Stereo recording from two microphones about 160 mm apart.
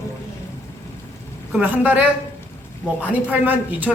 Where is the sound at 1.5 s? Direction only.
10° right (ahead or behind).